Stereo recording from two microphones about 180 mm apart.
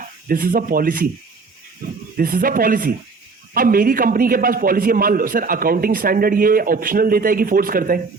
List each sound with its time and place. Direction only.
0.0 s a man's voice: 50° right (ahead or behind)